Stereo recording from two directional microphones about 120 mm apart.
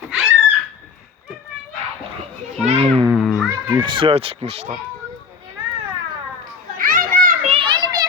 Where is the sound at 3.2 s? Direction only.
Centre (ahead or behind).